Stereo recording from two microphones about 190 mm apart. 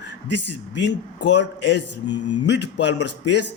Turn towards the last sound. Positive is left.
turn(degrees=65)  # may be behind; listen again after turning